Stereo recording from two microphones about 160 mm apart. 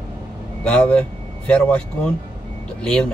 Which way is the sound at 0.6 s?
5° left (ahead or behind).